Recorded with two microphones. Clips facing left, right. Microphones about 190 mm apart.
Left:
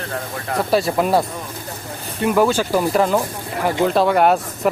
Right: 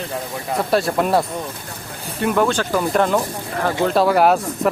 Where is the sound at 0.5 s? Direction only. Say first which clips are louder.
Left 1 dB; centre (ahead or behind).